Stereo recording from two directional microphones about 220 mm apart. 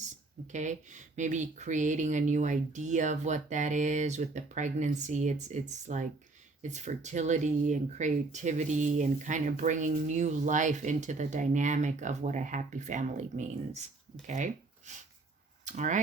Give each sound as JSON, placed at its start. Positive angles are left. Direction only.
{"t": 0.5, "sound": "speech", "side_deg": -35}